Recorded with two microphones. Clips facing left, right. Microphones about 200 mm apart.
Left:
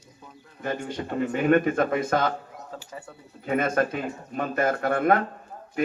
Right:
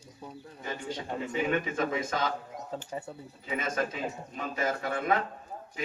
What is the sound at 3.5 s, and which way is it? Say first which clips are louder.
Speech: left 8 dB; 55° left (ahead or behind).